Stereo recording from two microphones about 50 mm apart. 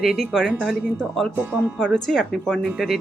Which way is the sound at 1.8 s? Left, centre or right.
Centre.